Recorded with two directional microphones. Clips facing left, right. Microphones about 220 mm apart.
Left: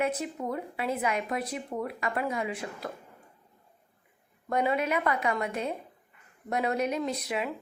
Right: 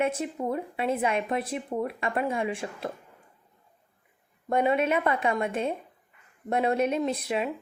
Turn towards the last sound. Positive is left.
turn(degrees=-30)  # may be behind; listen again after turning